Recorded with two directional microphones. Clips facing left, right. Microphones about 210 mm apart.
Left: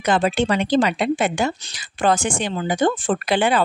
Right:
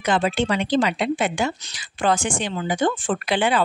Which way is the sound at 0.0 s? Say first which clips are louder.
Left 2 dB; 40° left (ahead or behind).